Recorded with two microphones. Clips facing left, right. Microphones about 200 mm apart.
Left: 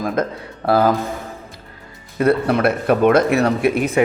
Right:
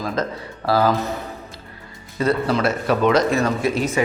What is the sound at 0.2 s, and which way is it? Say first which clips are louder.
Speech: left 3 dB; 55° left (ahead or behind).